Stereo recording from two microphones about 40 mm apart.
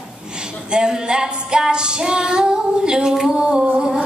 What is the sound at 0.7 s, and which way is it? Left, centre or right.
Female singing, centre.